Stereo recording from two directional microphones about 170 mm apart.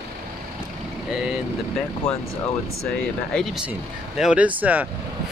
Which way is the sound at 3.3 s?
Centre (ahead or behind).